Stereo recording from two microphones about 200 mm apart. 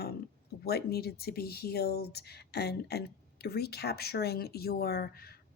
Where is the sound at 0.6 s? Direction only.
50° left (ahead or behind).